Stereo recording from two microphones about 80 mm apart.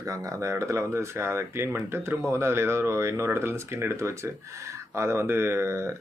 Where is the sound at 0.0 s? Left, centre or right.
Right.